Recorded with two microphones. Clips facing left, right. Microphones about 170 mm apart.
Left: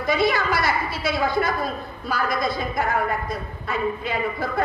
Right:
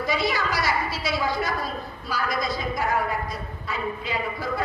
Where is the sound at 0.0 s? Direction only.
55° left (ahead or behind).